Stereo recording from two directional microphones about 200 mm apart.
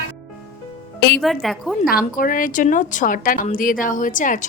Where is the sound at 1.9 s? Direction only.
45° left (ahead or behind).